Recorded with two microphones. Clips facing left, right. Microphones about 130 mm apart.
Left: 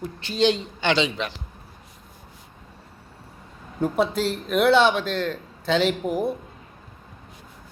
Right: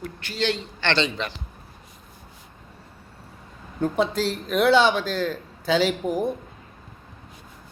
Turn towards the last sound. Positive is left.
turn(degrees=0)  # may be behind; listen again after turning